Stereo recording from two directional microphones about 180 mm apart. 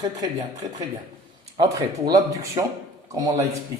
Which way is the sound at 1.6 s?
20° right (ahead or behind).